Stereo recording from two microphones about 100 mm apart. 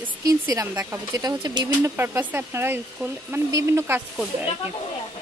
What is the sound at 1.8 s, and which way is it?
Speech, 20° right (ahead or behind).